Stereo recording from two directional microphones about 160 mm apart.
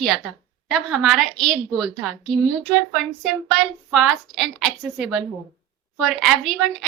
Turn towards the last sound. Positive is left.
turn(degrees=0)  # may be behind; listen again after turning